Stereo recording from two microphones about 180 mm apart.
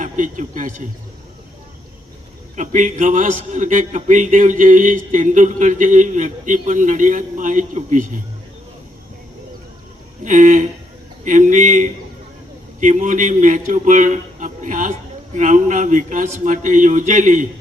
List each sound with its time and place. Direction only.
0.0 s a man's voice: 45° right (ahead or behind)
2.6 s a man's voice: 45° right (ahead or behind)
10.2 s a man's voice: 45° right (ahead or behind)